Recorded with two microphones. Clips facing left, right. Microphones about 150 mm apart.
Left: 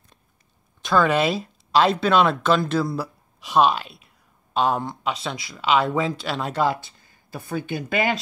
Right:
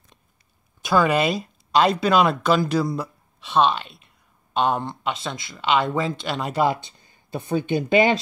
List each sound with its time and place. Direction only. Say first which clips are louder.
0.8 s speech: even; 5° right (ahead or behind)
6.6 s speech: right 2 dB; 15° right (ahead or behind)